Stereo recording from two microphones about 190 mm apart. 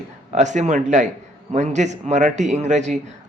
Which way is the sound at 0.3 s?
40° right (ahead or behind).